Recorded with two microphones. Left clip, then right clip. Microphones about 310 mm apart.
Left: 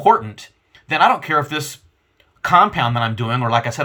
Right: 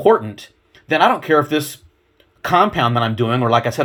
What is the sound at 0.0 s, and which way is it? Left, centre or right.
Speech, centre.